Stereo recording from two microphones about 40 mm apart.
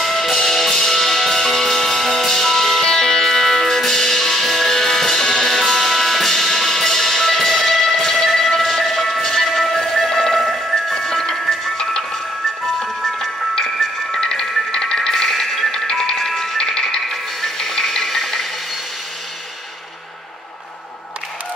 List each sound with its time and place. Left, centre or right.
0.0 s music: centre